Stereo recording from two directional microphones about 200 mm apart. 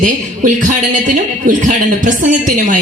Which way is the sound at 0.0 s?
40° right (ahead or behind).